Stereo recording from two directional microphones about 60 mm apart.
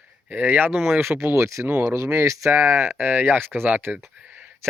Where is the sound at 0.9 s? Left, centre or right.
Right.